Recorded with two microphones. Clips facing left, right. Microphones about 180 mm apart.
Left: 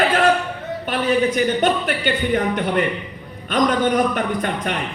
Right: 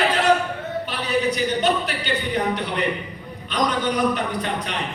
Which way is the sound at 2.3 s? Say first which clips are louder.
Left 5 dB; 50° left (ahead or behind).